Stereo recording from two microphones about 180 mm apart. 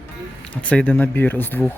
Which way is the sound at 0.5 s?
5° left (ahead or behind).